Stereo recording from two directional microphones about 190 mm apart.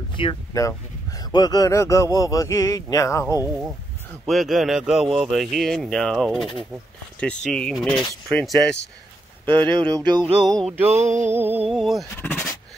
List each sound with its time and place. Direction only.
0.1 s a man's voice: 25° left (ahead or behind)
4.3 s a man's voice: centre (ahead or behind)
9.8 s music: 20° right (ahead or behind)
10.4 s speech: centre (ahead or behind)
10.9 s a sound: 35° right (ahead or behind)
11.3 s music: 10° right (ahead or behind)
11.7 s speech: centre (ahead or behind)
12.1 s speech: 10° left (ahead or behind)